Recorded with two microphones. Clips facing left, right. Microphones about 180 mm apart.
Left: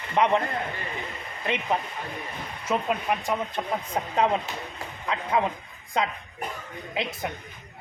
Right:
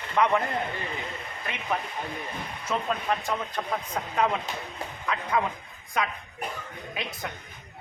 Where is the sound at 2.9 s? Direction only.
15° left (ahead or behind).